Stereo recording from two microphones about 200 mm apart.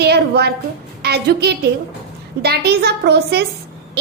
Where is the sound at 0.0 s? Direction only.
55° right (ahead or behind).